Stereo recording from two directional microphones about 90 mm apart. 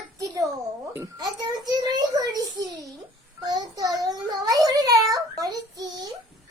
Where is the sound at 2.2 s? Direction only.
45° right (ahead or behind).